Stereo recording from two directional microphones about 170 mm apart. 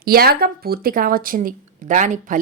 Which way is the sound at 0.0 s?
60° right (ahead or behind).